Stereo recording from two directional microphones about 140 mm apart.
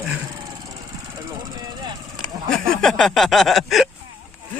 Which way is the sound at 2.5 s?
5° left (ahead or behind).